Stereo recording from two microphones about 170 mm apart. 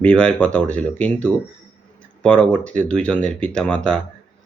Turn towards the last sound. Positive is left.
turn(degrees=5)  # may be behind; listen again after turning